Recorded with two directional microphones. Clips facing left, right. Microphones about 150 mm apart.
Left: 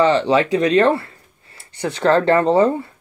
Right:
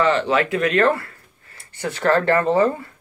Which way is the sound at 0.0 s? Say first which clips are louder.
Left 3 dB; 25° left (ahead or behind).